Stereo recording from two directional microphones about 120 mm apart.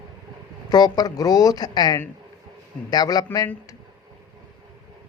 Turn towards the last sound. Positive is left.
turn(degrees=35)  # may be behind; listen again after turning